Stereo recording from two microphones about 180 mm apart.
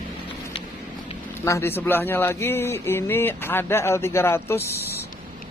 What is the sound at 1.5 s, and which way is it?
A man's voice, 15° left (ahead or behind).